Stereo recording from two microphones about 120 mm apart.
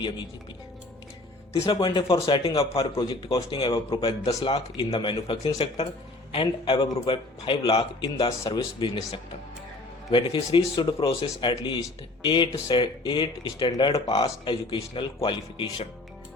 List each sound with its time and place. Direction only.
1.7 s speech: 40° left (ahead or behind)
4.2 s speech: 30° left (ahead or behind)
4.4 s speech: 45° left (ahead or behind)